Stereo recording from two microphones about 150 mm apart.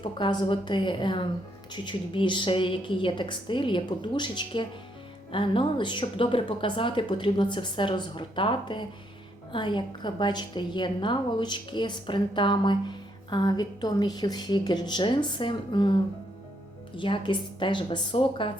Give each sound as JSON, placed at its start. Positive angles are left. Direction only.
{"t": 0.0, "sound": "a woman's voice", "side_deg": 30}